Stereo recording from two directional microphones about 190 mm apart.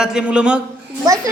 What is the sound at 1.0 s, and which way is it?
Speech, 15° right (ahead or behind).